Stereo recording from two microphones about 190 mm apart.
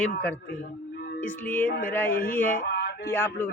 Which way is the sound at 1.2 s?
10° left (ahead or behind).